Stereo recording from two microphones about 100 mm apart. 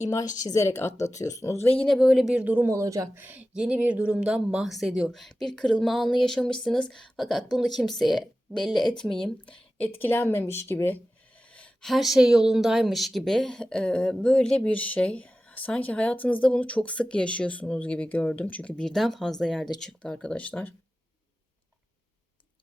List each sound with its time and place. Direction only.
0.0 s speech: 40° left (ahead or behind)
1.8 s speech: centre (ahead or behind); by 2.6 s 15° right (ahead or behind)
2.6 s speech: 35° right (ahead or behind)
3.2 s a woman's voice: 20° right (ahead or behind); by 10.9 s 25° left (ahead or behind)
11.5 s a sound: 15° left (ahead or behind)
11.9 s speech: centre (ahead or behind); by 20.7 s 15° left (ahead or behind)